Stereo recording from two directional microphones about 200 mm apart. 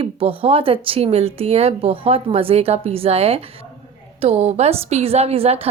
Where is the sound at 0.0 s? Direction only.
25° right (ahead or behind).